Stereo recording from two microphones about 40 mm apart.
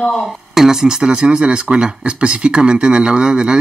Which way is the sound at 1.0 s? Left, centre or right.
Right.